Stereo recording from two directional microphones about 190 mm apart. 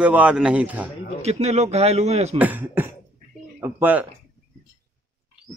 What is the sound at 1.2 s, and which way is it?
A man's voice, 35° right (ahead or behind).